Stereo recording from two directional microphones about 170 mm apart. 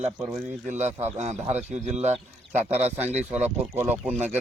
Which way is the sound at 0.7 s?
45° right (ahead or behind).